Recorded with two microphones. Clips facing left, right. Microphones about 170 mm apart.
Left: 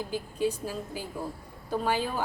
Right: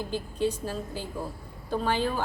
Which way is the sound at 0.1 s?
10° left (ahead or behind).